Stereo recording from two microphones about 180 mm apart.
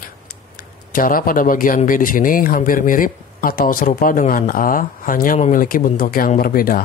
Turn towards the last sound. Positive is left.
turn(degrees=55)  # may be behind; listen again after turning